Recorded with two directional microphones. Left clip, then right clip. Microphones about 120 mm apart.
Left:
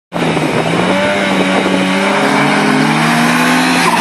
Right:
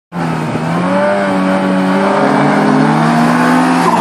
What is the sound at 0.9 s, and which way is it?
Vehicle, 25° left (ahead or behind).